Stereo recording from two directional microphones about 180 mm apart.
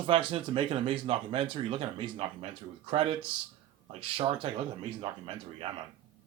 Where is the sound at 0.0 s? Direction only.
30° right (ahead or behind).